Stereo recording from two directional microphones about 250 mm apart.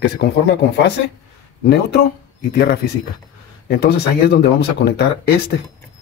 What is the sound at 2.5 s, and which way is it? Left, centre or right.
Speech, left.